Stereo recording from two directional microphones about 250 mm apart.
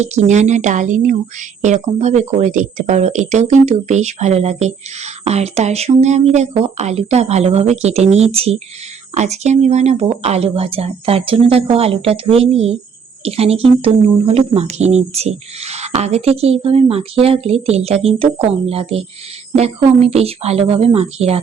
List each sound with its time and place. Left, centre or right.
0.0 s a woman's voice: right